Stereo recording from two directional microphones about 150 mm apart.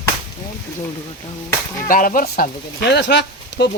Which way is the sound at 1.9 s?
65° left (ahead or behind).